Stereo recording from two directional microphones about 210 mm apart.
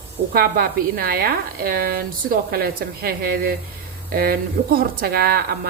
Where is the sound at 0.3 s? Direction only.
45° right (ahead or behind).